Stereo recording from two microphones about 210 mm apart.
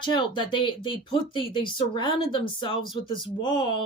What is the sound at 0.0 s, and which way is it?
Speech, 20° left (ahead or behind).